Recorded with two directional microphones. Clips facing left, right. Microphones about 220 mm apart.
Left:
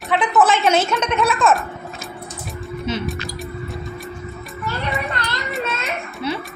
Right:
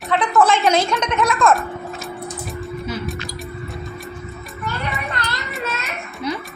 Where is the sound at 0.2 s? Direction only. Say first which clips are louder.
Even; 5° left (ahead or behind).